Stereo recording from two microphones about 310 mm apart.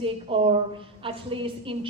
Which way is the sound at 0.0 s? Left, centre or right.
Centre.